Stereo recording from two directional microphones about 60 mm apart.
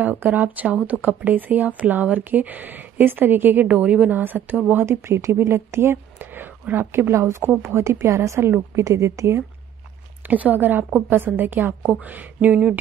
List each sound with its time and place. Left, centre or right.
0.0 s a woman's voice: right
4.8 s a woman's voice: right
10.2 s a woman's voice: right